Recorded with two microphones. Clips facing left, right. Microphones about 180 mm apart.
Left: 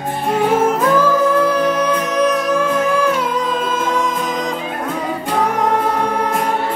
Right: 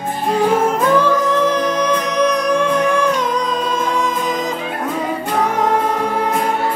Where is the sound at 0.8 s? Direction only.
5° left (ahead or behind).